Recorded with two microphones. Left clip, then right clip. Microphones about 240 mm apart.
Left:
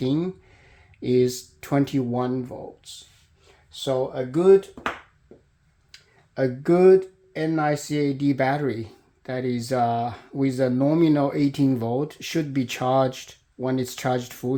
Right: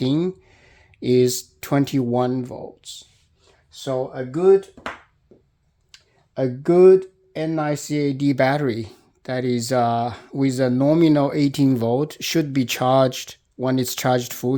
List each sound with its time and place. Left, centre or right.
0.0 s speech: right
3.7 s speech: right
5.9 s speech: right